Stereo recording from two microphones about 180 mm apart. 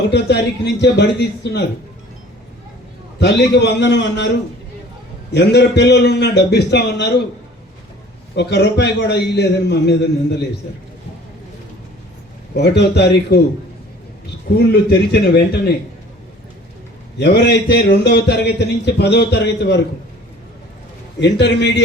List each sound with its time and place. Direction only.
0.1 s a man's voice: 70° left (ahead or behind)
3.2 s a man's voice: 70° left (ahead or behind)
5.3 s a man's voice: 70° left (ahead or behind)
8.4 s a man's voice: 70° left (ahead or behind)
12.5 s a man's voice: 70° left (ahead or behind)
14.7 s a man's voice: 65° left (ahead or behind)
17.2 s a man's voice: 70° left (ahead or behind)
21.2 s a man's voice: 75° left (ahead or behind)